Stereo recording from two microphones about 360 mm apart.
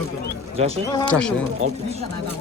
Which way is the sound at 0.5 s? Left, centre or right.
Centre.